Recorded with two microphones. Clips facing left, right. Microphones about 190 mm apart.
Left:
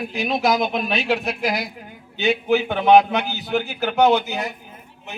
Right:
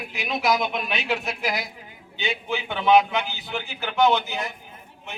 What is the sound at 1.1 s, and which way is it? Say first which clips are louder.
Speech: left 4 dB; 60° left (ahead or behind).